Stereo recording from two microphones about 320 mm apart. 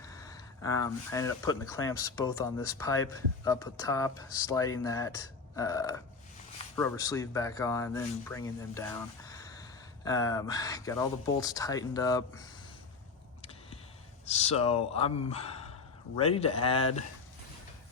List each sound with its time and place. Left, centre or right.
0.0 s speech: centre
14.3 s speech: centre